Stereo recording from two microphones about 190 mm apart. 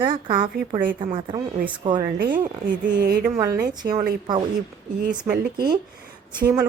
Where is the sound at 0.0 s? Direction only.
25° right (ahead or behind).